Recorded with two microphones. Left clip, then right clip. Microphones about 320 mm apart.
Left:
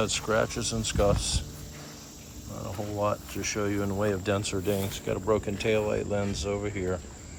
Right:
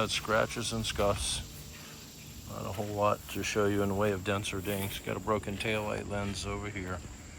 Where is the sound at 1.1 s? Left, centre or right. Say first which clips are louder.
Left 3 dB; left.